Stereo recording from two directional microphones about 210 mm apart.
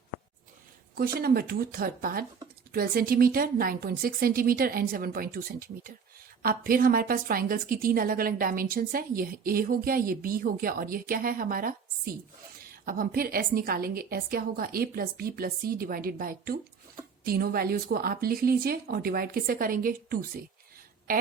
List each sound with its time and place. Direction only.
0.9 s a woman's voice: 45° right (ahead or behind)